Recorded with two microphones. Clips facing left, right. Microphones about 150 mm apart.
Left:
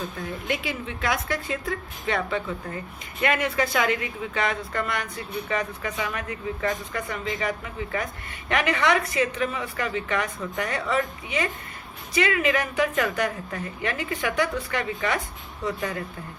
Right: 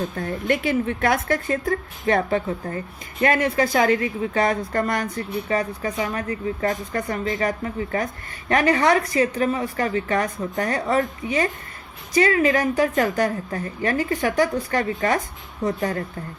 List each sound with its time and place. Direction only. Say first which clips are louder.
0.2 s speech: right 7 dB; 55° right (ahead or behind)